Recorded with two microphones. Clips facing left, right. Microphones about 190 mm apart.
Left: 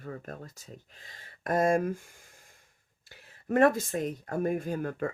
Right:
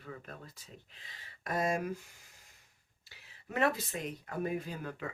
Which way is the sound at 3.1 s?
50° left (ahead or behind).